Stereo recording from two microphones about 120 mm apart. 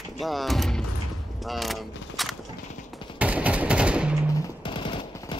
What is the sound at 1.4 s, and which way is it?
Mechanisms, centre (ahead or behind).